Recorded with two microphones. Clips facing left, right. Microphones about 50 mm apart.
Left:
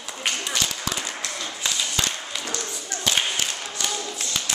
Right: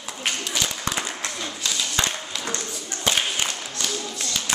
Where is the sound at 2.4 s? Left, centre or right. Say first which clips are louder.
Right 1 dB; right.